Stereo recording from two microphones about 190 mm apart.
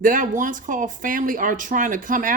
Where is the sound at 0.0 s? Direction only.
45° right (ahead or behind).